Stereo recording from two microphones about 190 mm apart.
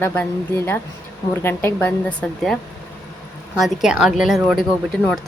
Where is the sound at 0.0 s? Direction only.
10° left (ahead or behind).